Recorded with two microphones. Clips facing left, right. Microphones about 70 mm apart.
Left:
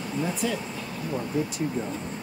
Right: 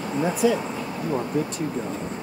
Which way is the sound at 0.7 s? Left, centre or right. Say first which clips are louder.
Right 5 dB; right.